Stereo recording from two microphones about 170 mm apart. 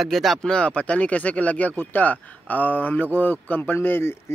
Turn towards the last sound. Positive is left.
turn(degrees=15)  # may be behind; listen again after turning